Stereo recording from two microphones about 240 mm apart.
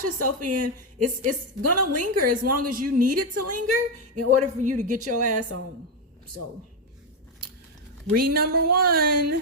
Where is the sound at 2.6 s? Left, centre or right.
Right.